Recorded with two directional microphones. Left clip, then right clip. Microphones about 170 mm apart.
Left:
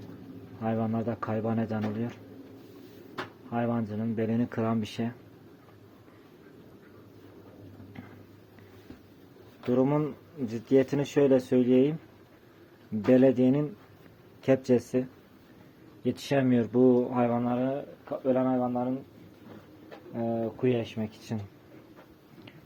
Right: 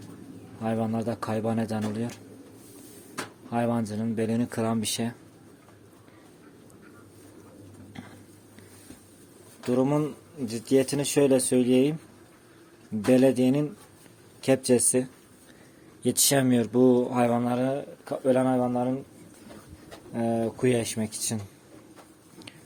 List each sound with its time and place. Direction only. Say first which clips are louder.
0.6 s speech: right 2 dB; 10° right (ahead or behind)
3.5 s speech: right 3 dB; 20° right (ahead or behind)
9.6 s speech: right 1 dB; 5° right (ahead or behind)
13.1 s speech: right 1 dB; 5° right (ahead or behind)
16.0 s speech: right 4 dB; 20° right (ahead or behind)
20.1 s speech: right 4 dB; 25° right (ahead or behind)